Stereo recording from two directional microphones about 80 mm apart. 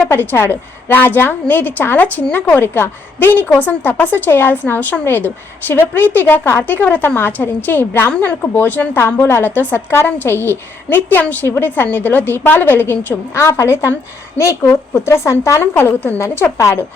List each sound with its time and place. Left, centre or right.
0.1 s a woman's voice: left
13.3 s speech: left